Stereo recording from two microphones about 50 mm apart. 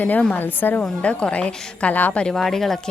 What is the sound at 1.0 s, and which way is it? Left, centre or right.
A woman's voice, left.